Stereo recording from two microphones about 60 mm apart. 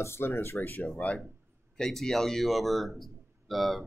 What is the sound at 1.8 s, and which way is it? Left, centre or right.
A man's voice, centre.